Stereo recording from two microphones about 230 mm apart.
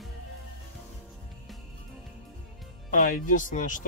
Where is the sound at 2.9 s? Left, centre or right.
Left.